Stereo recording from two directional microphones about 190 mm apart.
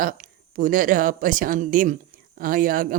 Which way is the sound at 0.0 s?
45° right (ahead or behind).